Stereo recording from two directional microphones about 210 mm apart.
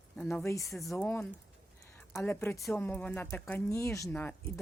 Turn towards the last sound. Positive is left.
turn(degrees=10)  # may be behind; listen again after turning